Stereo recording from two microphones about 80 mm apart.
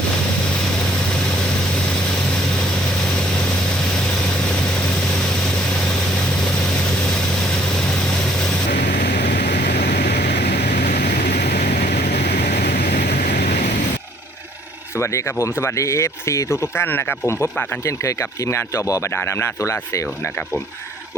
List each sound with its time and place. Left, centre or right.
14.9 s speech: left